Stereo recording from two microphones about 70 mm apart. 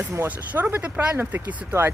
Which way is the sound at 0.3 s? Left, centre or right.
Right.